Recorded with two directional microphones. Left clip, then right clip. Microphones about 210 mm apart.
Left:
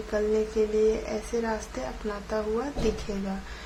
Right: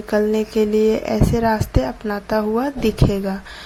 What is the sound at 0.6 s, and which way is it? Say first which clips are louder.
A woman's voice: right 9 dB; 35° right (ahead or behind).